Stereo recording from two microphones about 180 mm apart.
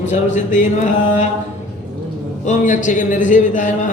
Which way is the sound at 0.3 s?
40° left (ahead or behind).